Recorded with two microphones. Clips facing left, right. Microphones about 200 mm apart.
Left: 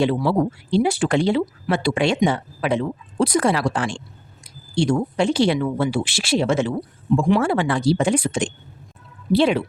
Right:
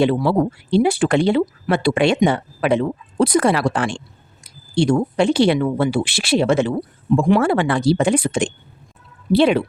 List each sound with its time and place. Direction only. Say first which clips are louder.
0.0 s speech: right 3 dB; 60° right (ahead or behind)